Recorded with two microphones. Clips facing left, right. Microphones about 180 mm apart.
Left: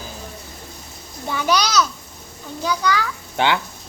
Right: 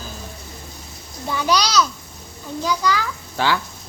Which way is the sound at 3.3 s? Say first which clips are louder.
Left 1 dB; 20° left (ahead or behind).